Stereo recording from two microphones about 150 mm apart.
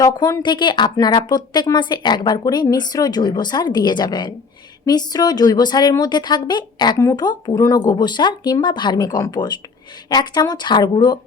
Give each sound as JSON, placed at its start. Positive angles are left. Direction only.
{"t": 0.0, "sound": "speech", "side_deg": 25}